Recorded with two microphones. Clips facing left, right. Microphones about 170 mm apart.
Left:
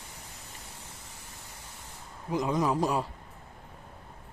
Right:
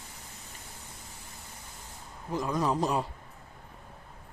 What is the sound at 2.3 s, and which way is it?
Speech, 15° left (ahead or behind).